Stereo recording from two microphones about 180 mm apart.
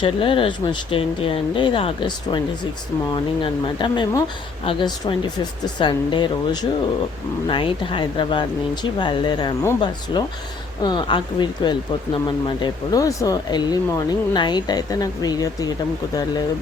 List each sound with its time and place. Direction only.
0.0 s speech: 30° left (ahead or behind)
3.4 s speech: 25° left (ahead or behind)